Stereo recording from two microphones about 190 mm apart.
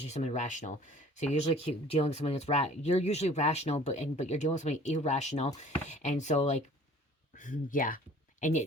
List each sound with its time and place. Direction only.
0.0 s speech: 35° left (ahead or behind)